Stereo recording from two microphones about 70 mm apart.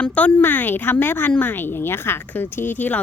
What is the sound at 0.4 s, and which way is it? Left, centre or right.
A woman's voice, left.